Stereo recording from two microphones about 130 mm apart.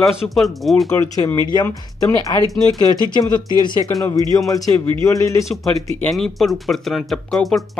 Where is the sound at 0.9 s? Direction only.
25° left (ahead or behind).